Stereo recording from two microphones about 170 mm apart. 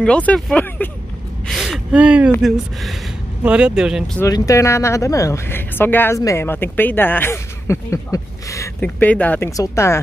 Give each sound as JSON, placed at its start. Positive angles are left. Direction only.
{"t": 0.0, "sound": "speech", "side_deg": 5}
{"t": 4.2, "sound": "speech", "side_deg": 20}